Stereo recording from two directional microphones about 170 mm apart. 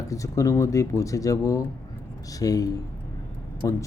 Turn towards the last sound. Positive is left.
turn(degrees=20)  # may be behind; listen again after turning